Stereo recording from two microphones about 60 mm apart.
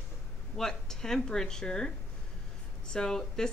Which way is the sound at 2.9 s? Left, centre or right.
Centre.